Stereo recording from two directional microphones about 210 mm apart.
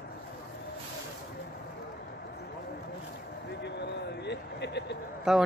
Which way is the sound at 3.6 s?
55° left (ahead or behind).